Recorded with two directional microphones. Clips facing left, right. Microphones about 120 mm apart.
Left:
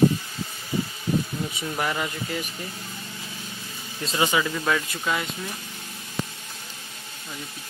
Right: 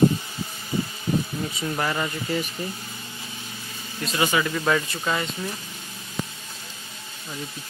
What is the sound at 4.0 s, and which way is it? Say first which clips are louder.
Speech: even; 30° left (ahead or behind).